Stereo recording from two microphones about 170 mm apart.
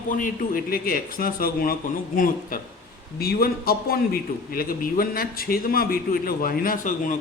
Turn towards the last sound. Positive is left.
turn(degrees=50)  # may be behind; listen again after turning